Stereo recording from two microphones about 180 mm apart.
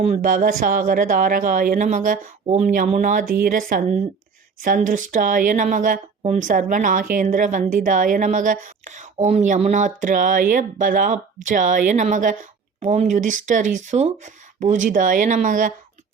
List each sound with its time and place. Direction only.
0.2 s speech: 50° right (ahead or behind)